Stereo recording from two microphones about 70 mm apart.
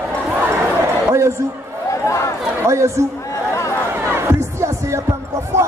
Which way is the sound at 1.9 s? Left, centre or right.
Left.